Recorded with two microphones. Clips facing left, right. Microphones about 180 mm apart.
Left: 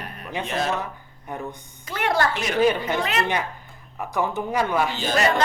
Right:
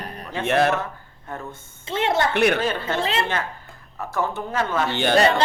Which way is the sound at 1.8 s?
25° right (ahead or behind).